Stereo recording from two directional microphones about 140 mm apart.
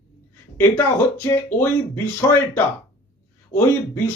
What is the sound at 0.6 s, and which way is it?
A man's voice, 20° left (ahead or behind).